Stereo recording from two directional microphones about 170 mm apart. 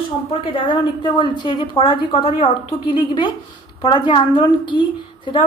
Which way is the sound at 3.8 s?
25° left (ahead or behind).